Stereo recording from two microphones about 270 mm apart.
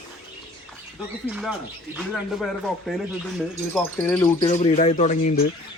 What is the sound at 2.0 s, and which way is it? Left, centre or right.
Cricket, centre.